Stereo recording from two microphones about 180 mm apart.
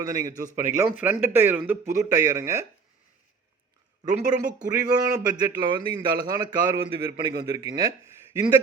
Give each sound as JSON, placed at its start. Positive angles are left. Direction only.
{"t": 0.0, "sound": "a man's voice", "side_deg": -20}
{"t": 4.0, "sound": "a man's voice", "side_deg": -20}